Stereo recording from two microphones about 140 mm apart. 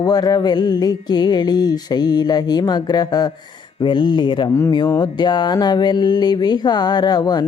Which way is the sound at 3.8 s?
35° left (ahead or behind).